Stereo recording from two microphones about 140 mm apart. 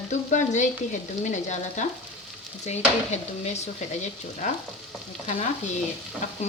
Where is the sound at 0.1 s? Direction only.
60° left (ahead or behind).